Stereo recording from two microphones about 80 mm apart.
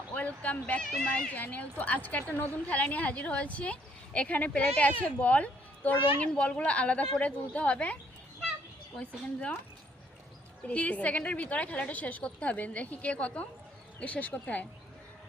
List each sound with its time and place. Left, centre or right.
0.1 s speech: centre
0.8 s speech: centre
1.0 s a woman's voice: centre
9.0 s a woman's voice: centre
10.7 s a woman's voice: centre